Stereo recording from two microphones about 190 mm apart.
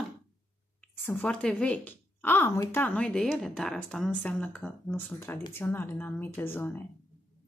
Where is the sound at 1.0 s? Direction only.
5° left (ahead or behind).